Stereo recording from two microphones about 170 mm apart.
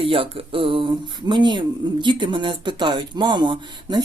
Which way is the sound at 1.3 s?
25° right (ahead or behind).